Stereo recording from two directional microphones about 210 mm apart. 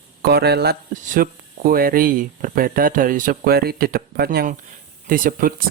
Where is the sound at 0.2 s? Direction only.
50° right (ahead or behind).